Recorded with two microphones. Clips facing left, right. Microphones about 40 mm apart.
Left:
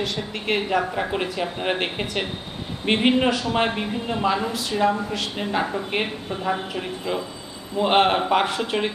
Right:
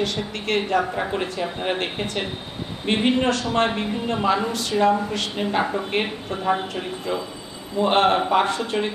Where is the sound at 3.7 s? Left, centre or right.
Centre.